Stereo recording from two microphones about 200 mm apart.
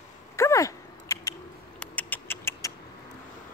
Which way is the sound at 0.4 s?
15° left (ahead or behind).